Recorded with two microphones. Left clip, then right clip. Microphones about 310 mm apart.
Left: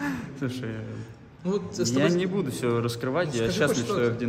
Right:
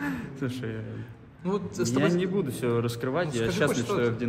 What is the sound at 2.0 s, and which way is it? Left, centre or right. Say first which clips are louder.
A man's voice: left 1 dB; centre.